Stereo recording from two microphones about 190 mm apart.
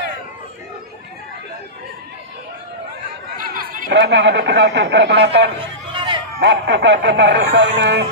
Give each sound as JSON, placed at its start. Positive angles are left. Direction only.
{"t": 3.3, "sound": "chatter", "side_deg": -45}
{"t": 3.9, "sound": "speech", "side_deg": -65}
{"t": 5.9, "sound": "a sound", "side_deg": -25}
{"t": 6.4, "sound": "speech", "side_deg": -65}